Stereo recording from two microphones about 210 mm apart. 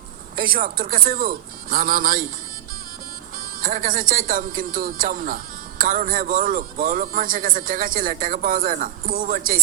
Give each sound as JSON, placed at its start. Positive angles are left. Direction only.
{"t": 0.3, "sound": "a man's voice", "side_deg": -45}
{"t": 3.3, "sound": "a man's voice", "side_deg": -40}